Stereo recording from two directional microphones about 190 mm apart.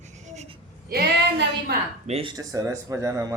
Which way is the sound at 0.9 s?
55° right (ahead or behind).